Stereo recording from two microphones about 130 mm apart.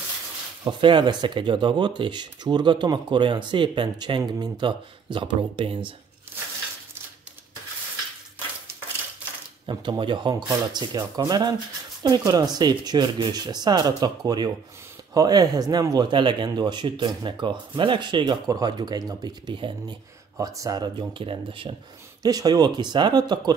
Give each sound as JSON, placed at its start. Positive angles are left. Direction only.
{"t": 0.7, "sound": "speech", "side_deg": -40}
{"t": 9.7, "sound": "speech", "side_deg": -35}
{"t": 20.3, "sound": "speech", "side_deg": -25}
{"t": 22.2, "sound": "speech", "side_deg": -30}